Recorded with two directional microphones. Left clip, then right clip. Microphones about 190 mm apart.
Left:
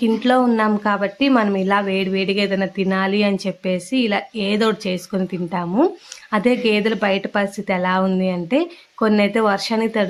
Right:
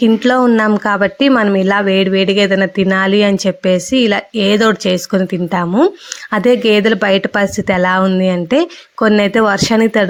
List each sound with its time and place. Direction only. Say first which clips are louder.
0.0 s speech: right 5 dB; 35° right (ahead or behind)